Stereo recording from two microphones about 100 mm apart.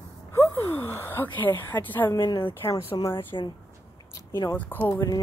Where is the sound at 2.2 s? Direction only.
60° left (ahead or behind).